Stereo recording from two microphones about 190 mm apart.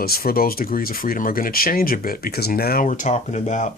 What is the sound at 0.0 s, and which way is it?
Speech, 50° left (ahead or behind).